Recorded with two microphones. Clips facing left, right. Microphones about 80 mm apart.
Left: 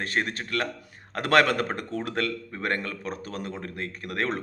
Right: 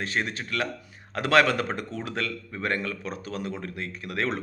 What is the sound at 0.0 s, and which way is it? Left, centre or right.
A man's voice, left.